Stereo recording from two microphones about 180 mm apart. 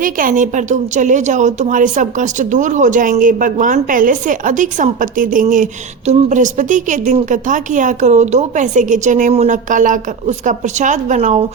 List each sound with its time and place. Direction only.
0.0 s a woman's voice: 50° right (ahead or behind)